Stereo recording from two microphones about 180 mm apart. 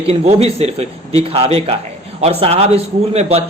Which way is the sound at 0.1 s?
35° right (ahead or behind).